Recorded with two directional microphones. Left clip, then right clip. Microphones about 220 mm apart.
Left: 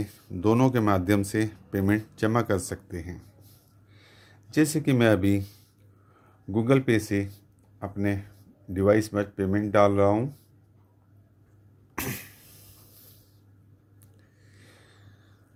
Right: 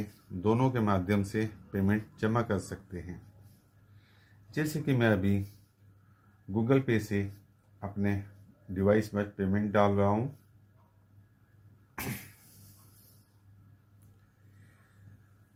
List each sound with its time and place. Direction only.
0.4 s speech: 50° left (ahead or behind)
4.5 s speech: 50° left (ahead or behind)
6.5 s speech: 50° left (ahead or behind)